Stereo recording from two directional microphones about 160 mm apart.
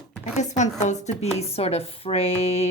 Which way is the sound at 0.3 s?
45° left (ahead or behind).